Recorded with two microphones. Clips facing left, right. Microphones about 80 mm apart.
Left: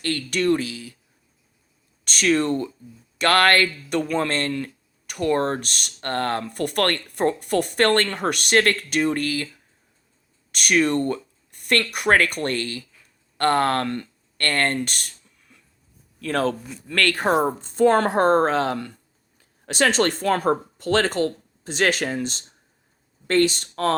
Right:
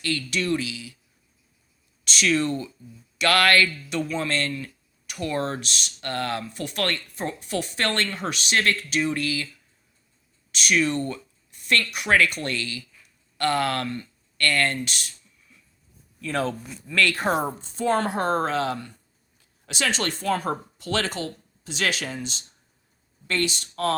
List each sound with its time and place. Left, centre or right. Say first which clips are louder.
0.0 s speech: left 4 dB; left
2.0 s speech: left 3 dB; left
6.4 s speech: left 6 dB; left
13.8 s a man's voice: left 4 dB; left
14.3 s speech: left 1 dB; left
14.8 s a sound: left 3 dB; left
16.2 s a man's voice: left 4 dB; left
17.0 s speech: left 3 dB; left
18.1 s speech: left 6 dB; left